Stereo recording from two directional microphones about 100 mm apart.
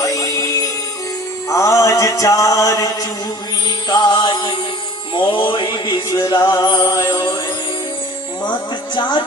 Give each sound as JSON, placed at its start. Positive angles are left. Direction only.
{"t": 0.0, "sound": "music", "side_deg": 35}
{"t": 9.0, "sound": "speech", "side_deg": 45}